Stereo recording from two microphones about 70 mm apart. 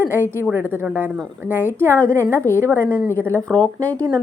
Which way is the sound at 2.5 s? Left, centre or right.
Left.